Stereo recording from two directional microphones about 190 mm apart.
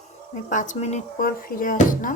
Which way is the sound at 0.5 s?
40° left (ahead or behind).